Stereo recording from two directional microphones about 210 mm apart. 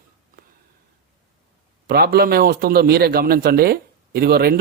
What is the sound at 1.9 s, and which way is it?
A man's voice, 50° right (ahead or behind).